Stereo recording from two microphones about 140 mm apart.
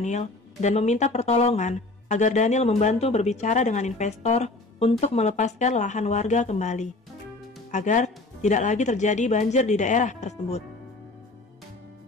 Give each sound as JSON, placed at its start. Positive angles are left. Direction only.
{"t": 0.0, "sound": "speech", "side_deg": 55}